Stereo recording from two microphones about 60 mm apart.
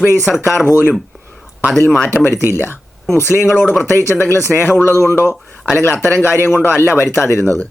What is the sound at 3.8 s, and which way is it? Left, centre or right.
Speech, left.